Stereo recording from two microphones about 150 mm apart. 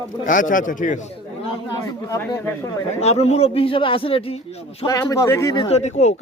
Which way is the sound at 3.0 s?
45° left (ahead or behind).